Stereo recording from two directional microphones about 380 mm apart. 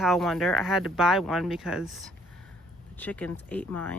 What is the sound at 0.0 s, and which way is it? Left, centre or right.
Speech, centre.